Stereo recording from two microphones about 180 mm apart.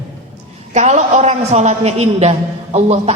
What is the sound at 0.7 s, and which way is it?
A woman's voice, 40° right (ahead or behind).